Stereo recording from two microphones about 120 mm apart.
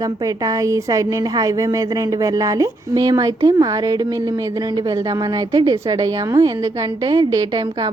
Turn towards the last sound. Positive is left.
turn(degrees=-35)  # may be behind; listen again after turning